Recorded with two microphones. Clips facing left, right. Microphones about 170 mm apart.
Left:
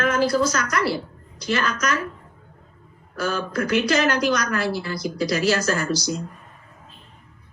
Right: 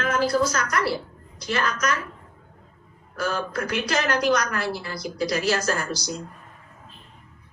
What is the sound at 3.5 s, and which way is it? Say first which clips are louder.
Speech: left 5 dB; 90° left.